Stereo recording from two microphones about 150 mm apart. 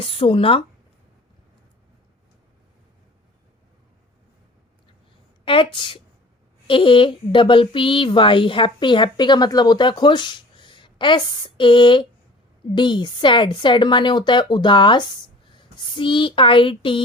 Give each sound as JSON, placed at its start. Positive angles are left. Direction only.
{"t": 0.0, "sound": "speech", "side_deg": 35}
{"t": 5.5, "sound": "speech", "side_deg": 35}